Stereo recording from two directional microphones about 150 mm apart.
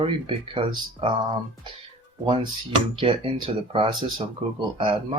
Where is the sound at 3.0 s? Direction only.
35° right (ahead or behind).